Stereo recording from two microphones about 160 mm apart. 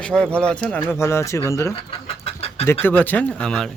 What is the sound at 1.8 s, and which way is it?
Chicken, 35° left (ahead or behind).